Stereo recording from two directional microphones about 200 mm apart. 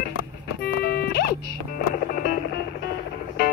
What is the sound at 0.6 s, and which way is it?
Music, 50° left (ahead or behind).